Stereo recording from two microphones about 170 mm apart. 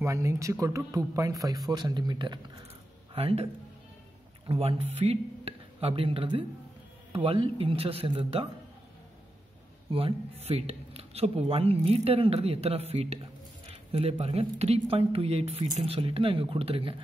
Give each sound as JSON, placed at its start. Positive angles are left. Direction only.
{"t": 0.0, "sound": "speech", "side_deg": -15}
{"t": 4.5, "sound": "speech", "side_deg": -35}
{"t": 9.8, "sound": "speech", "side_deg": -30}